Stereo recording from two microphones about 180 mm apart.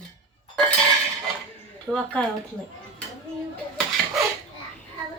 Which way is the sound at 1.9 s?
5° left (ahead or behind).